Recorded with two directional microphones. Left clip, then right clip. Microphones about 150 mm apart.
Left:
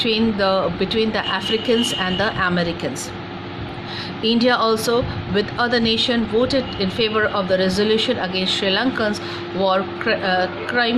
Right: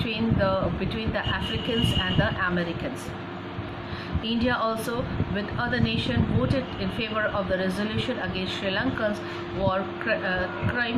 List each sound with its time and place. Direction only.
0.0 s speech: 60° left (ahead or behind)
4.2 s speech: 60° left (ahead or behind)